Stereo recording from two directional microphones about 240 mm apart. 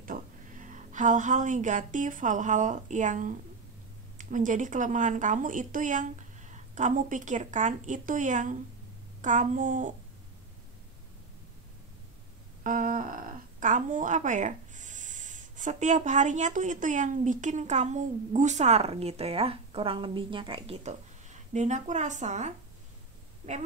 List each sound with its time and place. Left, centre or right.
0.0 s a woman's voice: right
12.6 s speech: right